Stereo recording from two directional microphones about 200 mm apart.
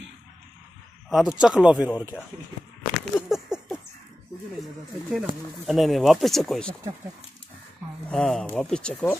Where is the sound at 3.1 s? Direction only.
Centre (ahead or behind).